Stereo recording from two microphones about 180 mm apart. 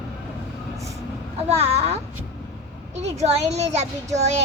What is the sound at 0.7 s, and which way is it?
Vehicle, 15° right (ahead or behind).